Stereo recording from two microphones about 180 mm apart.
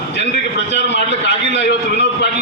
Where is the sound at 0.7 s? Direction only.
70° left (ahead or behind).